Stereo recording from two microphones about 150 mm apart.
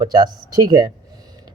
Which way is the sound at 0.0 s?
30° right (ahead or behind).